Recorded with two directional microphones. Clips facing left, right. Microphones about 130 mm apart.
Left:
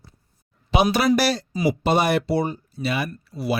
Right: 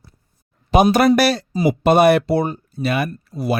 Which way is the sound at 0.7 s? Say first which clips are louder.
Right 5 dB; 45° right (ahead or behind).